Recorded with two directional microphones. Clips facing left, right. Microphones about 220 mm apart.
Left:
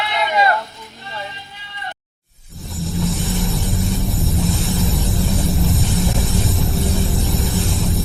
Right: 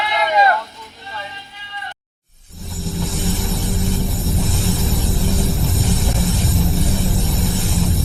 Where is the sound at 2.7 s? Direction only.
Centre (ahead or behind).